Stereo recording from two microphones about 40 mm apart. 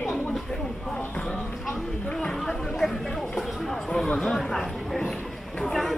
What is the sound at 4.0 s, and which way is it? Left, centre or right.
Chatter, centre.